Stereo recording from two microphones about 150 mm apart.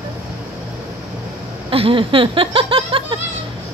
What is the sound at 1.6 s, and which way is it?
Speech, 35° right (ahead or behind).